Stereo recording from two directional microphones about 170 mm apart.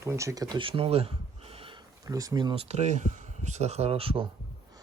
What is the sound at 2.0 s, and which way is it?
Speech, 20° right (ahead or behind).